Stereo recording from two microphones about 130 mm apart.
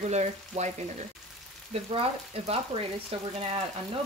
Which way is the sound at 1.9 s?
50° right (ahead or behind).